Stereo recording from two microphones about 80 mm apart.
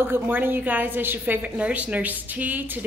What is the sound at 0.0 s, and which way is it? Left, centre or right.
A woman's voice, right.